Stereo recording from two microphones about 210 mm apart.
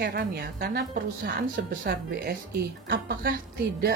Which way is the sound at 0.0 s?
50° right (ahead or behind).